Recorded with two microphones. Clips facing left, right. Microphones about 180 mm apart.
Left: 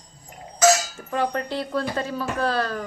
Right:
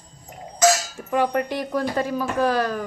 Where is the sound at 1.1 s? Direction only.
15° right (ahead or behind).